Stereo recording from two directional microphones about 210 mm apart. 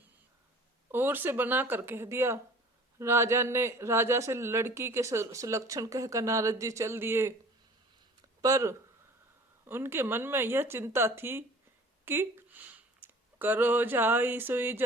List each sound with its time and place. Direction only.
0.9 s a man's voice: 10° right (ahead or behind)
8.4 s a man's voice: 15° right (ahead or behind)